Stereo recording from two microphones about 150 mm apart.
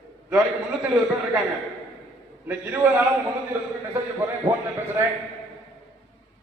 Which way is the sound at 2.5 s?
10° right (ahead or behind).